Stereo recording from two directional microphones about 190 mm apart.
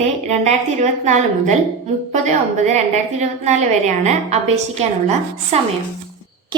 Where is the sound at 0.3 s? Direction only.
35° right (ahead or behind).